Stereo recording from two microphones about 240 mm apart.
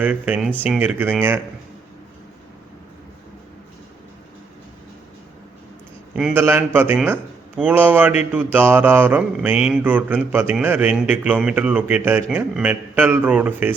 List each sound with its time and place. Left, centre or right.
0.0 s speech: centre
6.1 s speech: centre